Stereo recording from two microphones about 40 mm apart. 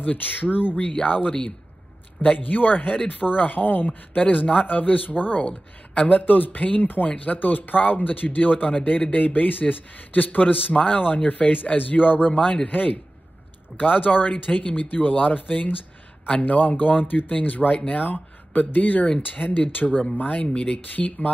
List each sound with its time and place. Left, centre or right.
0.0 s a man's voice: left
1.0 s speech: left
2.3 s a man's voice: left
5.4 s a man's voice: left
18.0 s a man's voice: left
20.9 s a man's voice: left